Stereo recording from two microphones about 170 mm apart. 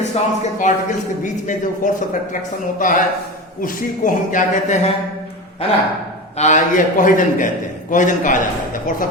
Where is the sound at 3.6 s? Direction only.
50° left (ahead or behind).